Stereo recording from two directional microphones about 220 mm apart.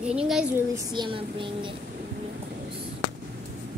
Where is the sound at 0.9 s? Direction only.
20° right (ahead or behind).